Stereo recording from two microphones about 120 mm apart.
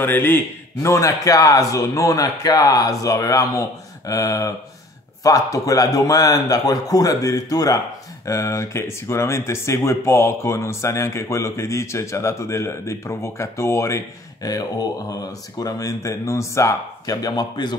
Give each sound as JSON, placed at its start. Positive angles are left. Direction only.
{"t": 0.0, "sound": "a man's voice", "side_deg": 15}